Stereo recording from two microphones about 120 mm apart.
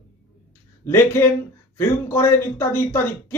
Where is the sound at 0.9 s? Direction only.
20° left (ahead or behind).